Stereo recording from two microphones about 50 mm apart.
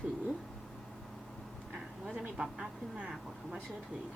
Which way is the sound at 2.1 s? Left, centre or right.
Right.